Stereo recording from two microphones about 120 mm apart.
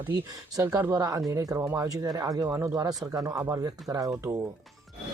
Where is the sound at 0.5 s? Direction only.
30° right (ahead or behind).